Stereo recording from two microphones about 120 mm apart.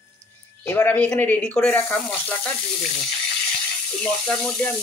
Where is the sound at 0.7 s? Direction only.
15° left (ahead or behind).